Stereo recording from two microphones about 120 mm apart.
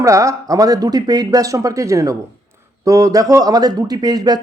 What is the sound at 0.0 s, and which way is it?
A man's voice, 25° right (ahead or behind).